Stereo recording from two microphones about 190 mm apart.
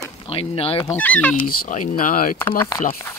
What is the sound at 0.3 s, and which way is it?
Speech, 30° left (ahead or behind).